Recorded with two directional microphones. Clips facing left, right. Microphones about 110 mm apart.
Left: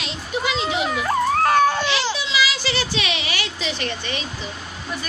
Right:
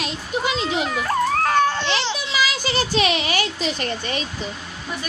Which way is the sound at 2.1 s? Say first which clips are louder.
Left 1 dB; 45° right (ahead or behind).